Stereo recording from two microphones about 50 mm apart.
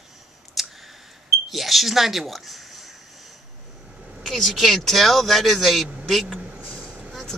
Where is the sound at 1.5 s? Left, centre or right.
Centre.